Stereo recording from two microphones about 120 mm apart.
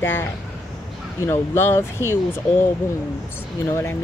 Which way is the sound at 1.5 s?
20° left (ahead or behind).